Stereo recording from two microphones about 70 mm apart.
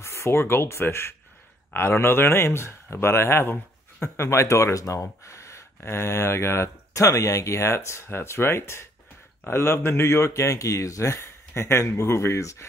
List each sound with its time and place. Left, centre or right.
0.0 s speech: left